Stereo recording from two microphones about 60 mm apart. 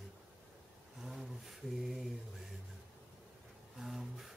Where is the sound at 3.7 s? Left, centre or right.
Centre.